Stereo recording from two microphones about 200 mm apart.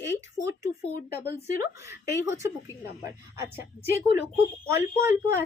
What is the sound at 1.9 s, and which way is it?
A woman's voice, 15° right (ahead or behind).